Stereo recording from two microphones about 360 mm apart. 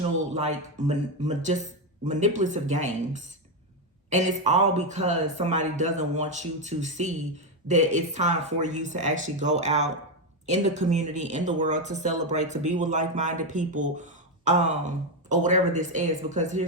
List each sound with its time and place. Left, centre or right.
0.3 s speech: centre